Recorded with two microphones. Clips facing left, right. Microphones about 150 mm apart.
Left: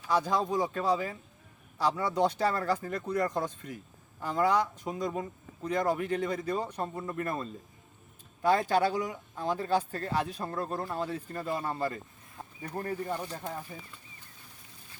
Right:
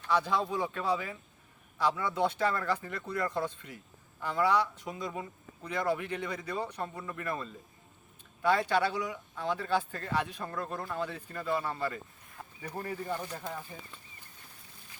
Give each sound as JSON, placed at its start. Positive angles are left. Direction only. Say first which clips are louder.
{"t": 0.1, "sound": "speech", "louder": "left 2 dB", "side_deg": 40}
{"t": 6.8, "sound": "speech", "louder": "left 3 dB", "side_deg": 30}
{"t": 13.1, "sound": "speech", "louder": "left 1 dB", "side_deg": 20}